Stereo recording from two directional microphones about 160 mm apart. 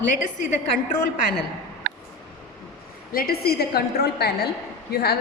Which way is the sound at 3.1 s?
70° left (ahead or behind).